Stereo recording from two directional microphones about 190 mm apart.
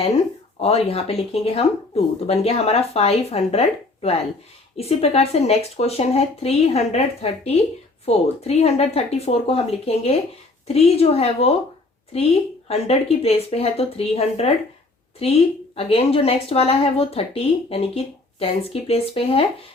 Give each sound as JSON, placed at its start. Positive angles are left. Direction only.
{"t": 0.6, "sound": "a woman's voice", "side_deg": 30}